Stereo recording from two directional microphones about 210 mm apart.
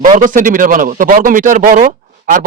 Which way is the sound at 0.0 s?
40° right (ahead or behind).